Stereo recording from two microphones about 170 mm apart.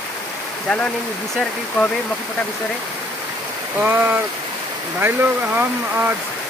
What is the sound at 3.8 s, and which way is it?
Speech, 10° right (ahead or behind).